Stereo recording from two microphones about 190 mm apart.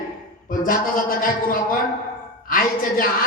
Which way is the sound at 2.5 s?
50° left (ahead or behind).